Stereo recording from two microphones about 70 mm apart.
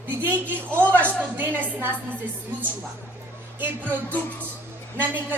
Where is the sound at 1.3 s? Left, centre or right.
Right.